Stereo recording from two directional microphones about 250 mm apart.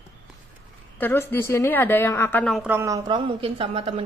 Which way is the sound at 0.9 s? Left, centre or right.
Centre.